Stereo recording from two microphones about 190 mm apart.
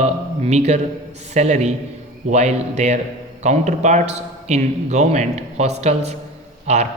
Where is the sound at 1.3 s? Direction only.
35° right (ahead or behind).